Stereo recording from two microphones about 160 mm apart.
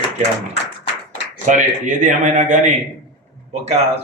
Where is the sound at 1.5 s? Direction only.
50° right (ahead or behind).